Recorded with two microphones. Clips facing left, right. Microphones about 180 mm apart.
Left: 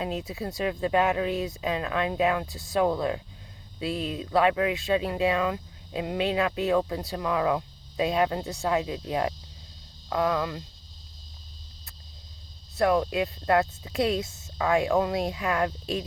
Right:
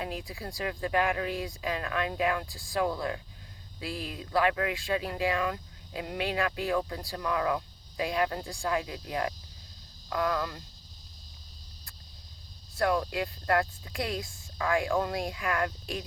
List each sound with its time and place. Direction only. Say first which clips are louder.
0.0 s speech: left 5 dB; 20° left (ahead or behind)
12.7 s speech: left 5 dB; 20° left (ahead or behind)